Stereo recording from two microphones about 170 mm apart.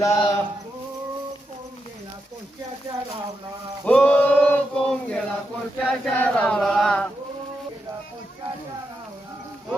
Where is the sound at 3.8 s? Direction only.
5° left (ahead or behind).